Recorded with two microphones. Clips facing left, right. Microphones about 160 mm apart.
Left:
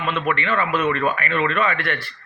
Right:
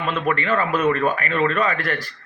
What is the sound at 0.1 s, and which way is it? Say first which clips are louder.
Speech: right 1 dB; 40° right (ahead or behind).